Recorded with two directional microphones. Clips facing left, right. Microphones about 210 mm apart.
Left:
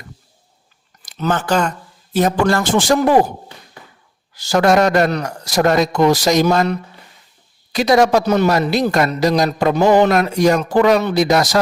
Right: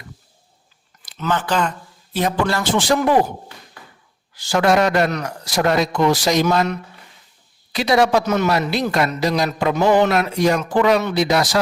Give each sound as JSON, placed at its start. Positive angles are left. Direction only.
{"t": 1.0, "sound": "a man's voice", "side_deg": 45}
{"t": 4.4, "sound": "a man's voice", "side_deg": 40}
{"t": 7.7, "sound": "a man's voice", "side_deg": 45}